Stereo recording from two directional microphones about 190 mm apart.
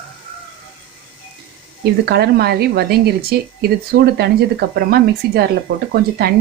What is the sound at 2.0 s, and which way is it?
Speech, 55° right (ahead or behind).